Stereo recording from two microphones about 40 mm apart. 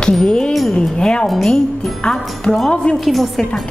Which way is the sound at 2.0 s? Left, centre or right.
Left.